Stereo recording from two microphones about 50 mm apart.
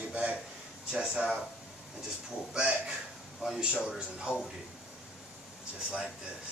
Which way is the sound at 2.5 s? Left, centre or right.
Centre.